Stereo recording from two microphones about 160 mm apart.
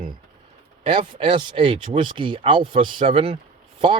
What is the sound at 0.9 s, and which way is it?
Speech, 30° right (ahead or behind).